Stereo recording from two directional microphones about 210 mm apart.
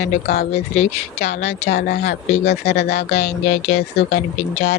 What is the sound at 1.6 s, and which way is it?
Speech, 55° left (ahead or behind).